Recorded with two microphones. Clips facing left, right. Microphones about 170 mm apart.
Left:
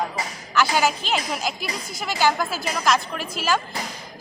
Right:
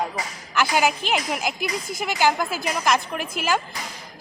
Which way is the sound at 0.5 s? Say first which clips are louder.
Even; 15° right (ahead or behind).